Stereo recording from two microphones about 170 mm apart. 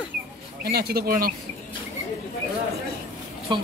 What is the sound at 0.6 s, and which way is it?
Speech, 65° right (ahead or behind).